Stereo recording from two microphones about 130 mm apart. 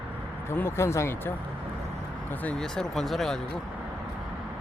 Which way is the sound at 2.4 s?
10° left (ahead or behind).